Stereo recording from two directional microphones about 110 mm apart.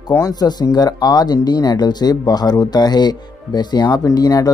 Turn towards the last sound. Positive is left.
turn(degrees=35)  # may be behind; listen again after turning